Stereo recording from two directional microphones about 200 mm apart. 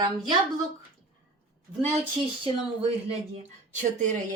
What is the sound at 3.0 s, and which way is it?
A woman's voice, 30° right (ahead or behind).